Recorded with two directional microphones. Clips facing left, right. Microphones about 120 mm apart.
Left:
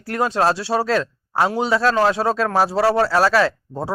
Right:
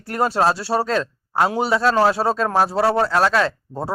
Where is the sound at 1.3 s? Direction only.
10° right (ahead or behind).